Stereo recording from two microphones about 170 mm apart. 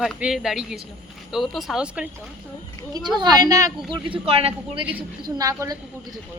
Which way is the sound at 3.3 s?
20° right (ahead or behind).